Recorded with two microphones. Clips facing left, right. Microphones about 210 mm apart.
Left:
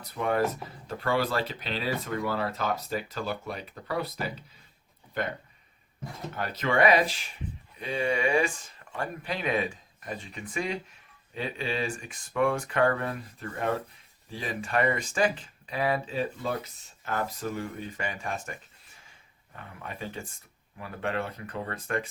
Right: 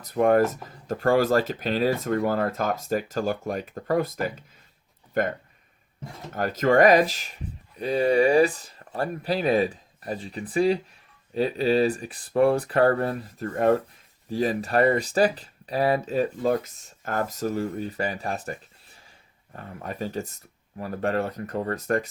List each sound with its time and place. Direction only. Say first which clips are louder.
0.0 s speech: right 7 dB; 45° right (ahead or behind)
6.3 s speech: right 8 dB; 45° right (ahead or behind)
19.5 s speech: right 7 dB; 40° right (ahead or behind)